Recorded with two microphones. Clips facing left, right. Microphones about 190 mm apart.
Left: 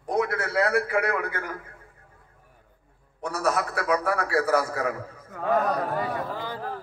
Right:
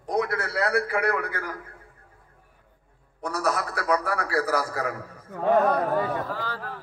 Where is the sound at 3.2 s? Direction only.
35° right (ahead or behind).